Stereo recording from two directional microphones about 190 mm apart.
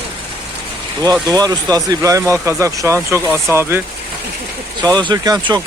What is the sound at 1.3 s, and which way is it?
Speech, 20° right (ahead or behind).